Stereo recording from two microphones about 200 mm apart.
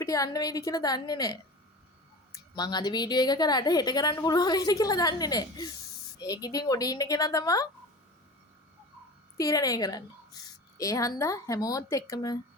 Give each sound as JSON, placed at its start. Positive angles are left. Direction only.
{"t": 0.0, "sound": "a woman's voice", "side_deg": 15}
{"t": 9.4, "sound": "speech", "side_deg": 15}